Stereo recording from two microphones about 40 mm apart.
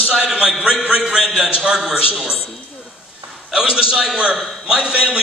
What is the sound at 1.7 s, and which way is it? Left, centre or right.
Speech, centre.